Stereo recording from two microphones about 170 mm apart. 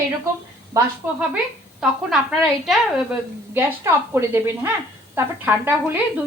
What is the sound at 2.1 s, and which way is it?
Speech, centre (ahead or behind).